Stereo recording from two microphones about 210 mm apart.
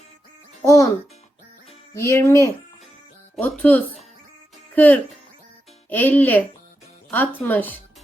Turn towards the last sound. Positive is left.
turn(degrees=10)  # may be behind; listen again after turning